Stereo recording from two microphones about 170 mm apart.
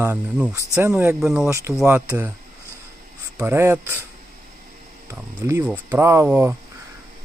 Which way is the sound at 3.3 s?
15° right (ahead or behind).